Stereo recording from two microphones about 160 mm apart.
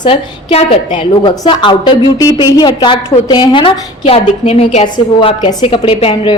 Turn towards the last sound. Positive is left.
turn(degrees=35)  # may be behind; listen again after turning